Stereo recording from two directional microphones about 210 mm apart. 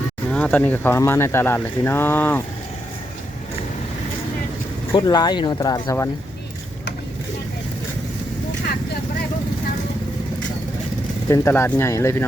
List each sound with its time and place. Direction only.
0.3 s speech: 5° left (ahead or behind)
4.9 s speech: 20° left (ahead or behind)
11.3 s speech: 10° left (ahead or behind)